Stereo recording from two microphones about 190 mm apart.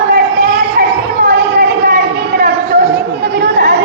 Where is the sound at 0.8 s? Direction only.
50° right (ahead or behind).